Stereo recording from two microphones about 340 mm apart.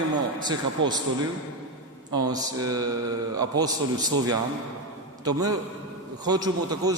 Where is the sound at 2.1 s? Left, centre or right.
Centre.